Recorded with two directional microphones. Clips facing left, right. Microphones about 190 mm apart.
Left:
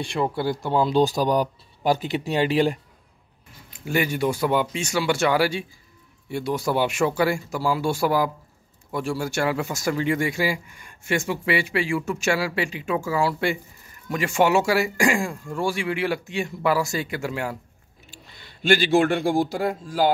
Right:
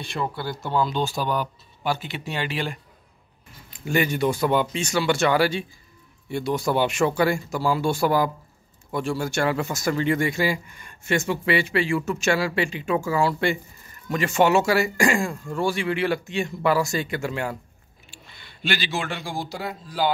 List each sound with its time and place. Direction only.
0.2 s speech: 30° left (ahead or behind)
3.7 s speech: 10° left (ahead or behind)
18.1 s speech: 40° left (ahead or behind)